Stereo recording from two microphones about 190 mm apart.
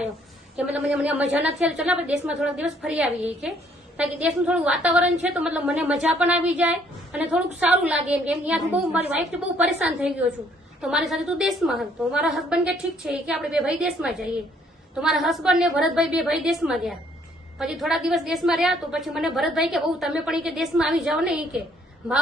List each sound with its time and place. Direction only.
0.5 s a woman's voice: 5° right (ahead or behind)